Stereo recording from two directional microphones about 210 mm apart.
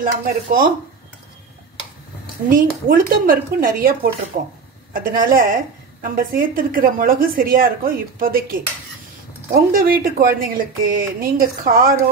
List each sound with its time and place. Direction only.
0.0 s speech: 40° right (ahead or behind)
2.5 s a woman's voice: 40° right (ahead or behind)
9.7 s a woman's voice: 45° right (ahead or behind)